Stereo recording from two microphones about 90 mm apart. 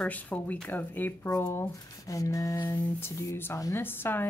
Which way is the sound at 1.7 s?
40° left (ahead or behind).